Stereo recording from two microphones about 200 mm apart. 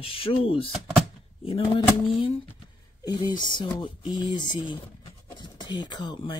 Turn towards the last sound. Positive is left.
turn(degrees=20)  # may be behind; listen again after turning